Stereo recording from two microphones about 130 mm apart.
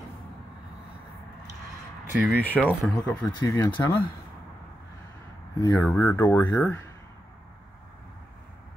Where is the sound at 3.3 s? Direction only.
30° left (ahead or behind).